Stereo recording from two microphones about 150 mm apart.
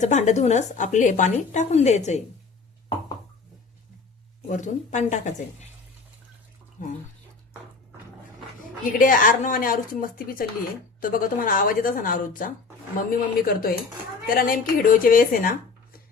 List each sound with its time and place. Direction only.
0.0 s a woman's voice: 50° left (ahead or behind)
4.5 s a woman's voice: 55° left (ahead or behind)
8.9 s speech: 65° left (ahead or behind)
13.1 s speech: 75° left (ahead or behind)